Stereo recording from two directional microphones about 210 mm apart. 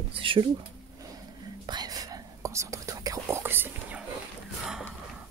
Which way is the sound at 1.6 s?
20° right (ahead or behind).